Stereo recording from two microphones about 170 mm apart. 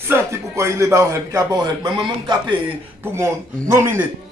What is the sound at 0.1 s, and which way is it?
A man's voice, 15° right (ahead or behind).